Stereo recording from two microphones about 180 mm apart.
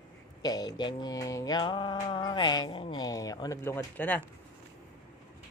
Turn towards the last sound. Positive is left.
turn(degrees=10)  # may be behind; listen again after turning